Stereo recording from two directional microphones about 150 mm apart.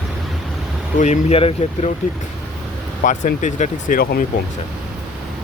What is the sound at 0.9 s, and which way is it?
Speech, 50° left (ahead or behind).